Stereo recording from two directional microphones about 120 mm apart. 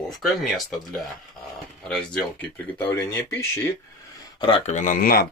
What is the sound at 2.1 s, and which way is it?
Speech, 15° left (ahead or behind).